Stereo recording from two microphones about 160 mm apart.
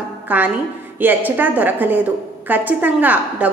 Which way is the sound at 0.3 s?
10° right (ahead or behind).